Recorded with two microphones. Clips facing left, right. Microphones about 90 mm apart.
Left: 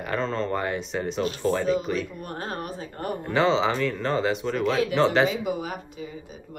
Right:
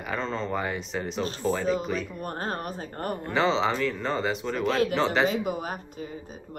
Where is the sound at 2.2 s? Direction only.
40° right (ahead or behind).